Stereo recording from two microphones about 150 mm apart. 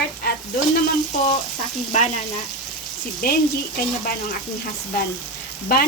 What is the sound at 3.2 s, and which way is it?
Speech, 80° left.